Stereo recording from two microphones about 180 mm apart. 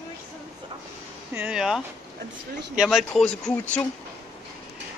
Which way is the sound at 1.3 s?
5° right (ahead or behind).